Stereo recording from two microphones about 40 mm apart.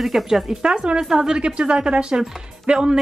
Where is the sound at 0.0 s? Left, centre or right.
Centre.